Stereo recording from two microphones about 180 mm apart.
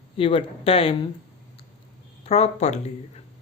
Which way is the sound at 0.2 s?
30° left (ahead or behind).